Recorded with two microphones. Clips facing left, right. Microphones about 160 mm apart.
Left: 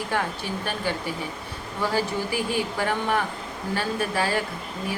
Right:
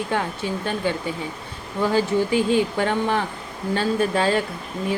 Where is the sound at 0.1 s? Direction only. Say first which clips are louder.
Right 3 dB; 20° right (ahead or behind).